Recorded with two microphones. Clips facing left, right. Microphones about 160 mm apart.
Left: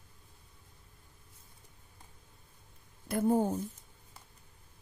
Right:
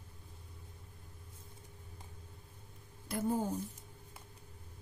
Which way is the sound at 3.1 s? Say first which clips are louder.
Left 6 dB; 55° left (ahead or behind).